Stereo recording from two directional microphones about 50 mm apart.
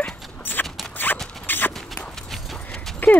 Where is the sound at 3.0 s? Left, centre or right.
Left.